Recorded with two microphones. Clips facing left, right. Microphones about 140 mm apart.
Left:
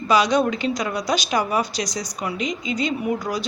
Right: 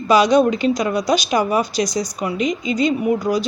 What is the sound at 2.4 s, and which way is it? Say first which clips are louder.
Speech: right 7 dB; 45° right (ahead or behind).